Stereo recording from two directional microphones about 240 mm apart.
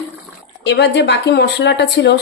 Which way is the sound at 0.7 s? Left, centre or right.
Left.